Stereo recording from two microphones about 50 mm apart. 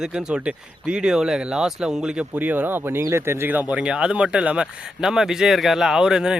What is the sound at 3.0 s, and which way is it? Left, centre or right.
Speech, right.